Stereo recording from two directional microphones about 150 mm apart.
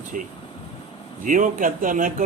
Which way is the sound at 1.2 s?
60° right (ahead or behind).